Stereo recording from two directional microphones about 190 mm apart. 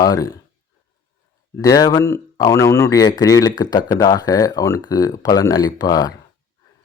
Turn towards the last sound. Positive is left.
turn(degrees=20)  # may be behind; listen again after turning